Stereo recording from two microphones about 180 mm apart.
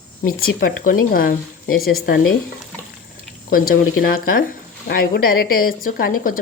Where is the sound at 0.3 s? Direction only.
50° left (ahead or behind).